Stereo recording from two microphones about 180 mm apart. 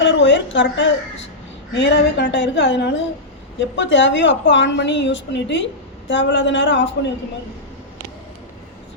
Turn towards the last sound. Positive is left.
turn(degrees=90)